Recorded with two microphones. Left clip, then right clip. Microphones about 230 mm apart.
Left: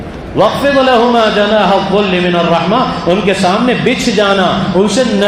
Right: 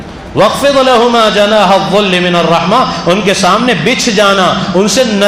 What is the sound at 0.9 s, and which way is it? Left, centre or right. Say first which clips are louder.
A man's voice: right 2 dB; right.